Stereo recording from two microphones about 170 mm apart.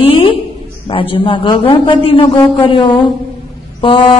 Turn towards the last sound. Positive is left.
turn(degrees=30)  # may be behind; listen again after turning